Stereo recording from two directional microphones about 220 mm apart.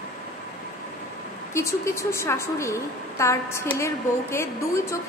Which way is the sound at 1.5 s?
10° left (ahead or behind).